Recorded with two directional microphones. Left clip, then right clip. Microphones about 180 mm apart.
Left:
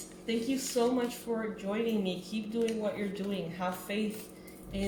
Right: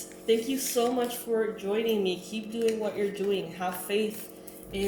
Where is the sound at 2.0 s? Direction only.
35° left (ahead or behind).